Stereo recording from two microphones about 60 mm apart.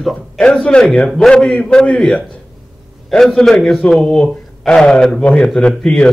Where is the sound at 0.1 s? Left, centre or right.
Centre.